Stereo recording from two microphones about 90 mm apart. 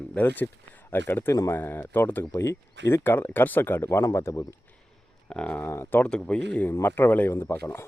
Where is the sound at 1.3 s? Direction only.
35° left (ahead or behind).